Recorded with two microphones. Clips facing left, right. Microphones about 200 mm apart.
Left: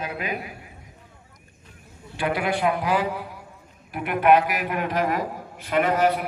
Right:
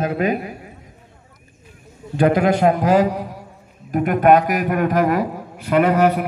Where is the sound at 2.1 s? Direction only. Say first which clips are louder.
Right 9 dB; 45° right (ahead or behind).